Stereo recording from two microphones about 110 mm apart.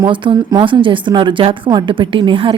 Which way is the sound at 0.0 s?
50° right (ahead or behind).